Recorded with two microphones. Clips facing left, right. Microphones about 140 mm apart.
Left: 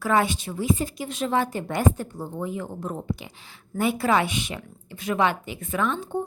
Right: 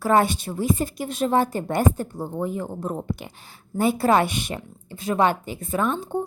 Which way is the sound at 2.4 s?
45° right (ahead or behind).